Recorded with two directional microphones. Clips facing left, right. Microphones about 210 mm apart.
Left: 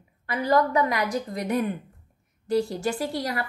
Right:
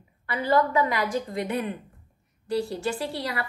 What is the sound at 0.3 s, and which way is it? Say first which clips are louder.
A woman's voice: left 1 dB; 40° left (ahead or behind).